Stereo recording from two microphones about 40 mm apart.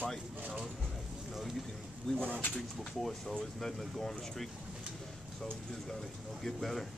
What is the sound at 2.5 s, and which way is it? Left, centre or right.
Speech, centre.